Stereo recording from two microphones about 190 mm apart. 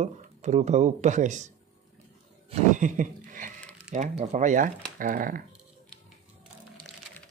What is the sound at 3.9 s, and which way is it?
Speech, 40° right (ahead or behind).